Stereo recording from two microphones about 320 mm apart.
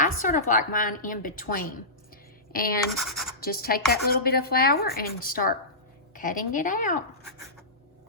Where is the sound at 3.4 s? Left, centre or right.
Left.